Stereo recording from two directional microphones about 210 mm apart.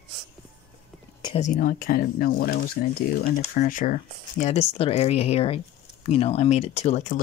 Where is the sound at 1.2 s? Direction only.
30° left (ahead or behind).